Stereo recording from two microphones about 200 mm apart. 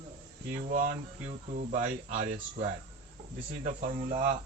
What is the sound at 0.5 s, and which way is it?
Speech, 35° right (ahead or behind).